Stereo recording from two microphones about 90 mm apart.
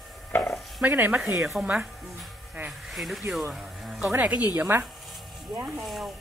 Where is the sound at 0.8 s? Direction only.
20° right (ahead or behind).